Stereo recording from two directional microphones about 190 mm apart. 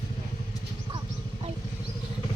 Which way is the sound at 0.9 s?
25° right (ahead or behind).